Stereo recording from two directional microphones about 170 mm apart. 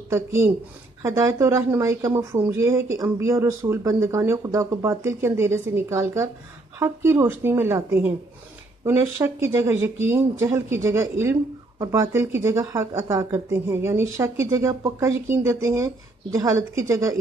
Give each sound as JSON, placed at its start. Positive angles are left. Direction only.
{"t": 0.1, "sound": "speech", "side_deg": -15}